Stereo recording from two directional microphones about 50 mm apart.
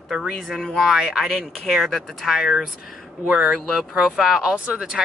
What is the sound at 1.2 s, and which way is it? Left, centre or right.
Speech, centre.